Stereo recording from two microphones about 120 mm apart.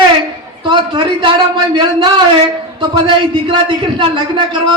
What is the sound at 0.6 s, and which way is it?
A man's voice, 40° right (ahead or behind).